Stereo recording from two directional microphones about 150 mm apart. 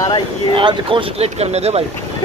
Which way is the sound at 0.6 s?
35° right (ahead or behind).